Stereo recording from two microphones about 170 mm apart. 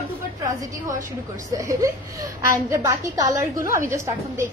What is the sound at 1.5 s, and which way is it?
A woman's voice, 20° right (ahead or behind).